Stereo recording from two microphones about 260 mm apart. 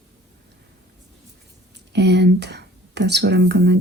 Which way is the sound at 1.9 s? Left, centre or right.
Right.